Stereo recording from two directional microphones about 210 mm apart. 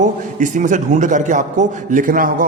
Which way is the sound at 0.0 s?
35° right (ahead or behind).